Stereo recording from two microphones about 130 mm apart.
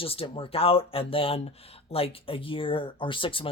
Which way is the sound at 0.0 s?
45° left (ahead or behind).